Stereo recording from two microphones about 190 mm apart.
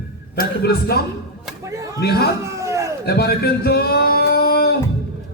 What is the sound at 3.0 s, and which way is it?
Singing, 55° left (ahead or behind).